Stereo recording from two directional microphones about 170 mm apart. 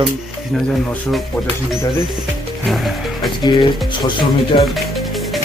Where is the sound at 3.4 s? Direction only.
25° left (ahead or behind).